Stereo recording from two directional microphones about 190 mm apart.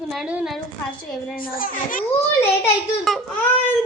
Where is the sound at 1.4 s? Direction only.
45° left (ahead or behind).